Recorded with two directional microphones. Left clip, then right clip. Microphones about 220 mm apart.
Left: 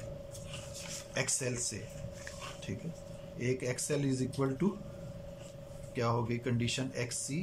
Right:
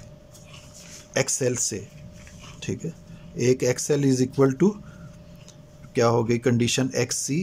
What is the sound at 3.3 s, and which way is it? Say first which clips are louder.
Speech: right 14 dB; 50° right (ahead or behind).